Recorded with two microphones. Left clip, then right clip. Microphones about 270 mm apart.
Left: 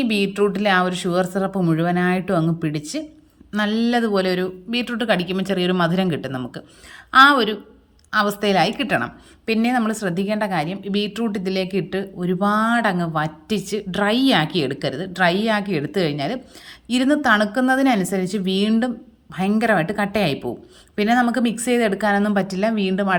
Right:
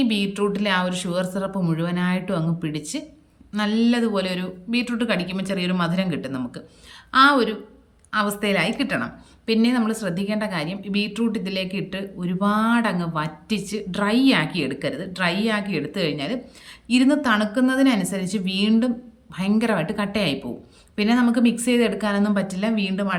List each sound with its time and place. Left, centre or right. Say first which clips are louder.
0.0 s a woman's voice: left 3 dB; centre